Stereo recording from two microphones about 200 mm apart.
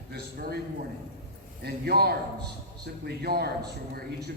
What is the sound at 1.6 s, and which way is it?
A man's voice, 50° right (ahead or behind).